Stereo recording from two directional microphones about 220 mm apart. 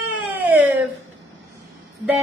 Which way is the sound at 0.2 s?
5° right (ahead or behind).